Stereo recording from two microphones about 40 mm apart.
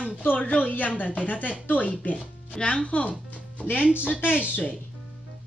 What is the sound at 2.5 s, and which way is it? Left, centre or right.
Speech, left.